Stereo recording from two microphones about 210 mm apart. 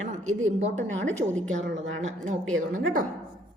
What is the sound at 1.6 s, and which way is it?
Speech, 65° right (ahead or behind).